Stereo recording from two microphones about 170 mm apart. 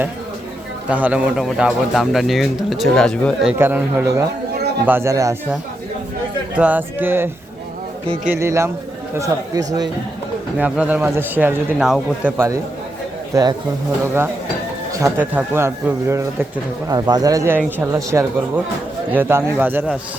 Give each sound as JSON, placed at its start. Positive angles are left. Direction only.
{"t": 0.9, "sound": "speech", "side_deg": -10}
{"t": 3.6, "sound": "speech", "side_deg": -10}
{"t": 6.6, "sound": "speech", "side_deg": -10}
{"t": 8.0, "sound": "speech", "side_deg": -35}
{"t": 8.3, "sound": "speech", "side_deg": -15}
{"t": 10.6, "sound": "speech", "side_deg": -10}
{"t": 13.3, "sound": "speech", "side_deg": -25}
{"t": 14.9, "sound": "speech", "side_deg": -15}